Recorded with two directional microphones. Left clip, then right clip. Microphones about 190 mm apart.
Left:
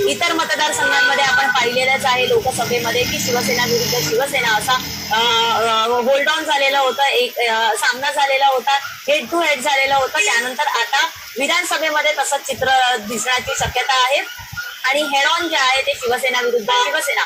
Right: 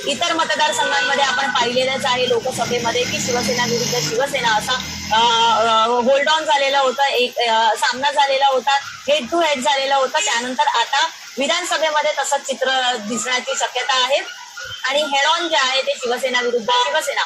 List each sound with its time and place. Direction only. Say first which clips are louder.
0.2 s speech: even; 35° left (ahead or behind)
4.2 s speech: right 1 dB; 35° left (ahead or behind)